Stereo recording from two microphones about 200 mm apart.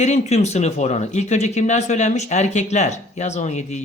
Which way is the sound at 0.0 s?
35° left (ahead or behind).